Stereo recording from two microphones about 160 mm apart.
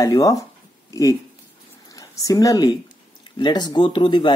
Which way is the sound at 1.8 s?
20° left (ahead or behind).